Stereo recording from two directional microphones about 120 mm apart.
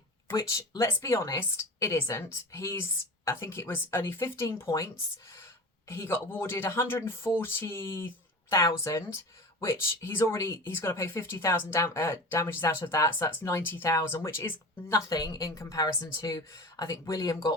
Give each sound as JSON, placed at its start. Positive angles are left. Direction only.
{"t": 0.3, "sound": "speech", "side_deg": 25}
{"t": 5.9, "sound": "speech", "side_deg": 20}